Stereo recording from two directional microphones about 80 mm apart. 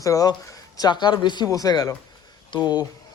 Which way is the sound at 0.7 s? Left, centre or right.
Left.